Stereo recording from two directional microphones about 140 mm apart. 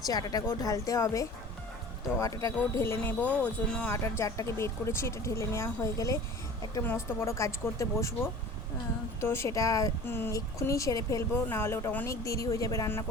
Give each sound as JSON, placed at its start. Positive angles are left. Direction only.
{"t": 0.0, "sound": "speech", "side_deg": 25}
{"t": 3.9, "sound": "speech", "side_deg": 20}